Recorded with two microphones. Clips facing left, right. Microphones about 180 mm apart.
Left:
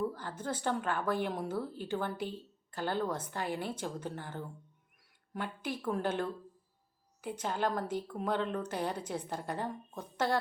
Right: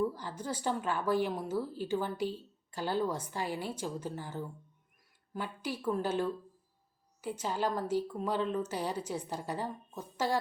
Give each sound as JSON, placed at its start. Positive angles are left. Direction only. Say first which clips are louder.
{"t": 0.3, "sound": "a woman's voice", "louder": "even", "side_deg": -10}